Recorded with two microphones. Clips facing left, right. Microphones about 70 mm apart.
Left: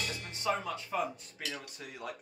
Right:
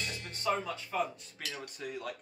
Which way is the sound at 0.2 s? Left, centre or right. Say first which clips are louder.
Right 2 dB; centre.